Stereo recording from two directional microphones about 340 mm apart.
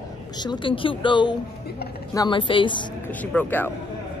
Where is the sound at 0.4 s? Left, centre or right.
Centre.